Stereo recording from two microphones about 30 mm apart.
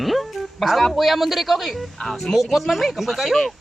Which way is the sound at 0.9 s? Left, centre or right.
Centre.